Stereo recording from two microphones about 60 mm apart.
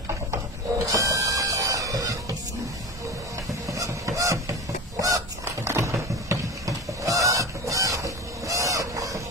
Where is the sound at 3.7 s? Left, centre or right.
Right.